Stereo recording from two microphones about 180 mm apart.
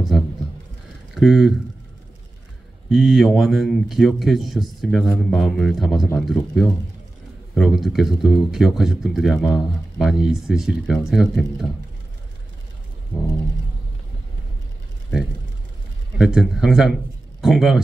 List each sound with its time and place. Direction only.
1.1 s speech: centre (ahead or behind)
2.9 s speech: centre (ahead or behind)
16.2 s speech: 5° right (ahead or behind)